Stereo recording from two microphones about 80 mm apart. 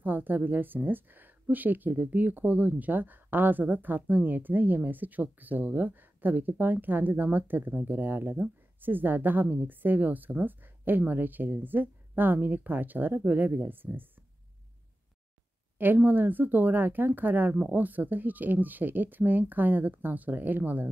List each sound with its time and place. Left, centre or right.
0.0 s speech: right
15.8 s speech: right